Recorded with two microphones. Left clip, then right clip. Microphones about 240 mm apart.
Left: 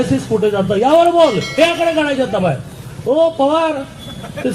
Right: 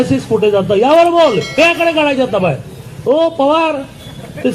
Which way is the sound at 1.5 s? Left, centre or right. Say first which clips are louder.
Right 2 dB; right.